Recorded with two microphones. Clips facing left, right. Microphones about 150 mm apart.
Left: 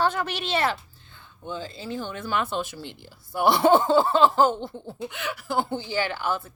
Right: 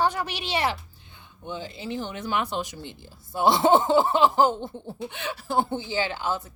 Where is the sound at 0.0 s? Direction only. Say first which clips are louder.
Left 1 dB; 10° right (ahead or behind).